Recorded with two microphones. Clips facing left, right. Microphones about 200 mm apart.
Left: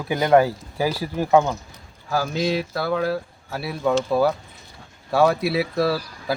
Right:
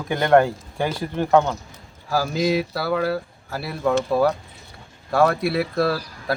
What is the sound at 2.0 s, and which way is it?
Speech, 5° right (ahead or behind).